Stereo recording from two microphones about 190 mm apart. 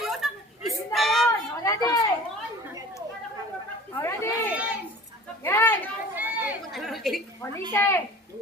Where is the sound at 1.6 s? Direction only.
20° left (ahead or behind).